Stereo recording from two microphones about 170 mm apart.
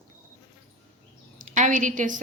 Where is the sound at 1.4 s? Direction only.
50° right (ahead or behind).